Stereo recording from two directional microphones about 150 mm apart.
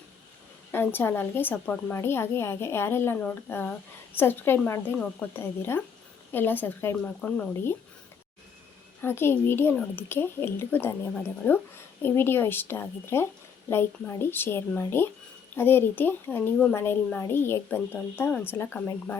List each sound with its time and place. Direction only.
0.7 s a woman's voice: 15° left (ahead or behind)
9.0 s a woman's voice: 15° left (ahead or behind)